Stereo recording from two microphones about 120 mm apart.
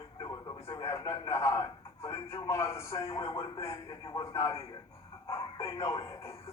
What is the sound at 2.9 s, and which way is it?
Speech, 45° left (ahead or behind).